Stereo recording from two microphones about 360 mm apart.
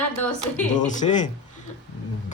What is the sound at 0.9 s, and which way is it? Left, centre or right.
Speech, left.